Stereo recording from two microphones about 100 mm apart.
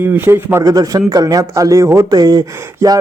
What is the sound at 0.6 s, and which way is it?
Speech, 40° right (ahead or behind).